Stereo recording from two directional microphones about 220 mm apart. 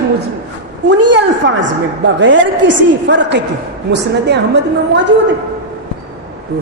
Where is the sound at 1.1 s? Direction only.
55° right (ahead or behind).